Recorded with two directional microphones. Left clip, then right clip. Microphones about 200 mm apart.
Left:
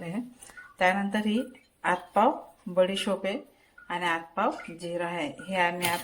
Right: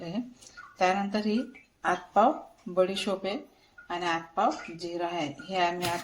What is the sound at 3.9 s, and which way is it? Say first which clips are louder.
Speech: left 1 dB; 20° left (ahead or behind).